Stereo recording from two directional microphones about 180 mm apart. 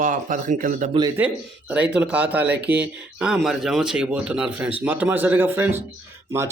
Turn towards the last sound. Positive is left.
turn(degrees=-15)  # may be behind; listen again after turning